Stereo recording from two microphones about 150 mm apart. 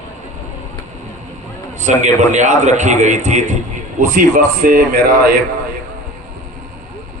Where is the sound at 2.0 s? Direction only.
55° right (ahead or behind).